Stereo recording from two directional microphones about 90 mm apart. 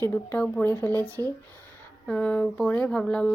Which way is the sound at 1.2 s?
35° left (ahead or behind).